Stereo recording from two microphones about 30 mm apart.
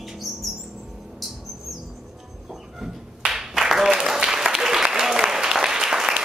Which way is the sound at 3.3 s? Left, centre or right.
Centre.